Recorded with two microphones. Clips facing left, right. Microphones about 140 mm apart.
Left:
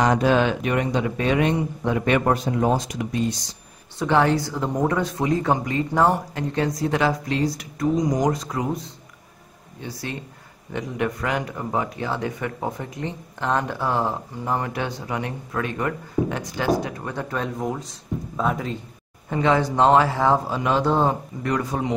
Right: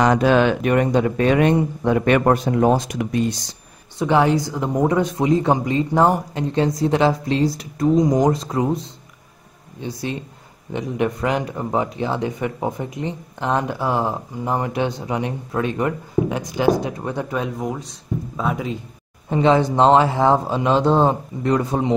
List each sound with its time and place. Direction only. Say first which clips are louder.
0.0 s speech: right 3 dB; 85° right; by 3.3 s 60° right (ahead or behind)
4.0 s a man's voice: right 2 dB; 15° right (ahead or behind)
19.2 s speech: right 4 dB; 25° right (ahead or behind)